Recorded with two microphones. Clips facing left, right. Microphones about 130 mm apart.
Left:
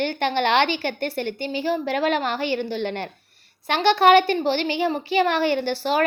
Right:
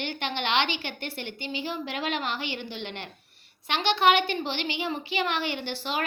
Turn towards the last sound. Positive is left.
turn(degrees=40)  # may be behind; listen again after turning